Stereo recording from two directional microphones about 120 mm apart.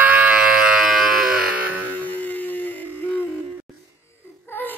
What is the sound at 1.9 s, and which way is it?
Music, 15° left (ahead or behind).